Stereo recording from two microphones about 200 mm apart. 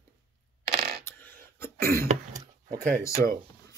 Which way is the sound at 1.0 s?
10° left (ahead or behind).